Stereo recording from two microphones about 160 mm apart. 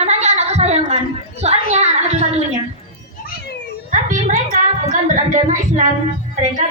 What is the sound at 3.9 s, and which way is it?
A woman's voice, 55° right (ahead or behind).